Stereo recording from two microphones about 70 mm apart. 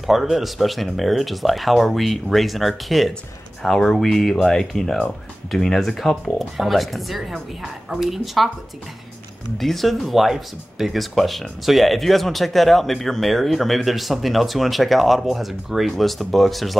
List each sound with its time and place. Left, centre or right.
0.0 s speech: centre
4.9 s speech: centre
5.6 s speech: centre
9.6 s speech: centre